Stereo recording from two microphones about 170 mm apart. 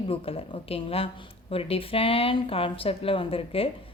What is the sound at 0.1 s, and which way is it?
Speech, 35° left (ahead or behind).